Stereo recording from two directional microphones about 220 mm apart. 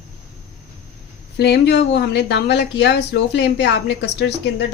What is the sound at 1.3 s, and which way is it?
Speech, 50° left (ahead or behind).